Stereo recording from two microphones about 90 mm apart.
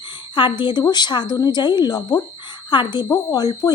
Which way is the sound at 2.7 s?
60° left (ahead or behind).